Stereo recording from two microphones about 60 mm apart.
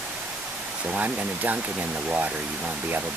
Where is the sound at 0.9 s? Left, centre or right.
Right.